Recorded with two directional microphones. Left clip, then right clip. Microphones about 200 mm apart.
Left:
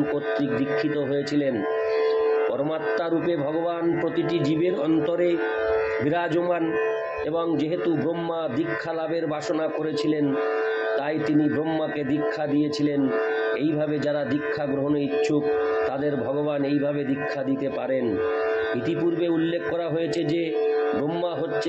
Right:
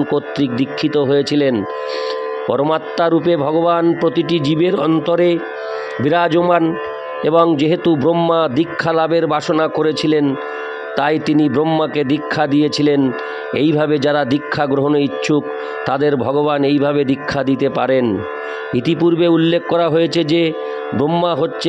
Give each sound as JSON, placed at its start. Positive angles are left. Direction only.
{"t": 0.1, "sound": "speech", "side_deg": -55}
{"t": 2.5, "sound": "speech", "side_deg": -55}